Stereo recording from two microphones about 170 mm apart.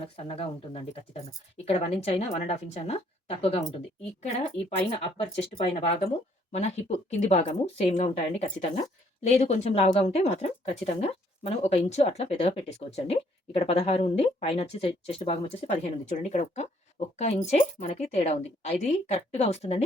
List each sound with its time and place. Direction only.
0.0 s a woman's voice: 35° left (ahead or behind)